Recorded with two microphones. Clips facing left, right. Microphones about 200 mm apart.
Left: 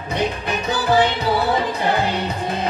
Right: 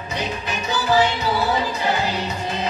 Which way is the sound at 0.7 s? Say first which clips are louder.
Left 1 dB; 55° left (ahead or behind).